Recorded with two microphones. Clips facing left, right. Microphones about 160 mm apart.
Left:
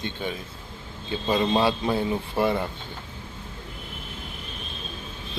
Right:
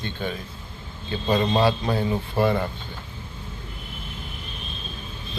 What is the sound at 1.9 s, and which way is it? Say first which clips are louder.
Speech: right 1 dB; 20° left (ahead or behind).